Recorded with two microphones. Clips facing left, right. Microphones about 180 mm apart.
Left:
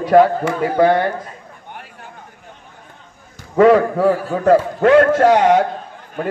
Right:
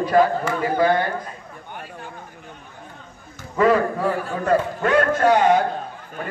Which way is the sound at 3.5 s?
70° left (ahead or behind).